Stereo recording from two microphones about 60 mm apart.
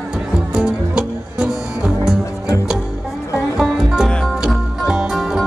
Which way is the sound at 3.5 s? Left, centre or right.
Centre.